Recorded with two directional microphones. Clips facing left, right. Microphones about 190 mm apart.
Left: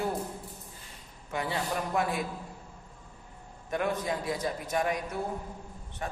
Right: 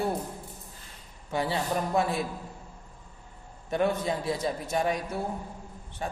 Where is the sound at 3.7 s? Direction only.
30° right (ahead or behind).